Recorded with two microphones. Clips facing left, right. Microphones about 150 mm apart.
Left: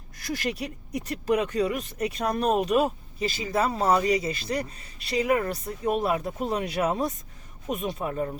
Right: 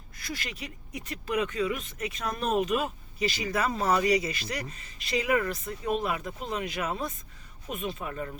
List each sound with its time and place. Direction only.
0.2 s speech: 45° left (ahead or behind)